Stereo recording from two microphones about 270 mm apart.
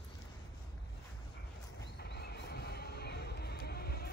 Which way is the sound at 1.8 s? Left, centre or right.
Left.